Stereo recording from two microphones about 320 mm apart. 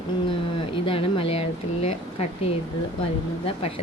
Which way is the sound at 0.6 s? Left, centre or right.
Centre.